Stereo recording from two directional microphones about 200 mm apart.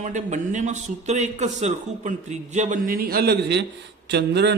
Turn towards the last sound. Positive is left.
turn(degrees=-55)  # may be behind; listen again after turning